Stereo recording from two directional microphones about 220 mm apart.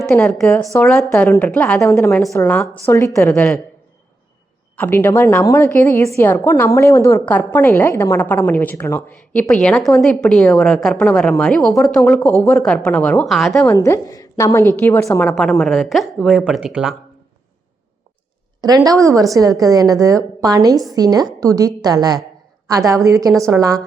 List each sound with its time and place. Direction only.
0.1 s a woman's voice: 5° left (ahead or behind)
4.8 s a woman's voice: 10° left (ahead or behind)
13.7 s a woman's voice: 15° left (ahead or behind); by 16.9 s 5° right (ahead or behind)
18.9 s a woman's voice: 15° right (ahead or behind)